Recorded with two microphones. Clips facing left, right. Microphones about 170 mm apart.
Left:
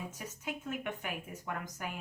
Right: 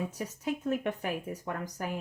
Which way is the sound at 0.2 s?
35° right (ahead or behind).